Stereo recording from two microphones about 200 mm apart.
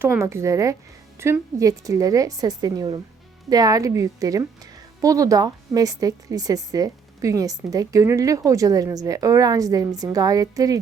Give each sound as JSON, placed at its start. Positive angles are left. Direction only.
{"t": 0.0, "sound": "speech", "side_deg": -10}